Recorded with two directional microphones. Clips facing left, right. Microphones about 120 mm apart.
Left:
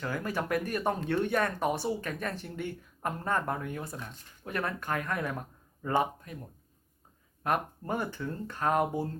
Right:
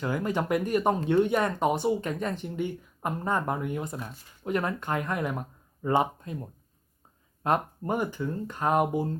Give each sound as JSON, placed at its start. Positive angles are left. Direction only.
{"t": 0.0, "sound": "speech", "side_deg": -20}
{"t": 7.9, "sound": "speech", "side_deg": -15}